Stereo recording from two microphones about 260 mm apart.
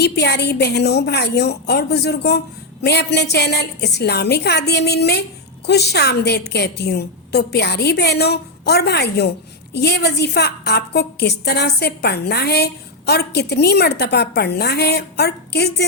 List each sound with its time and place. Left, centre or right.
0.0 s a woman's voice: left